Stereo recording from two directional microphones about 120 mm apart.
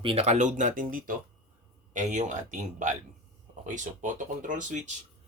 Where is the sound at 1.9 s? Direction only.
90° right.